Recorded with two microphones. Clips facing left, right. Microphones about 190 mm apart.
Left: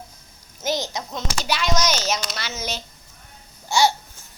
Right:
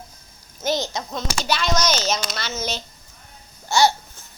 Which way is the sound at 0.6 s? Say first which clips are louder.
Right 2 dB; 15° left (ahead or behind).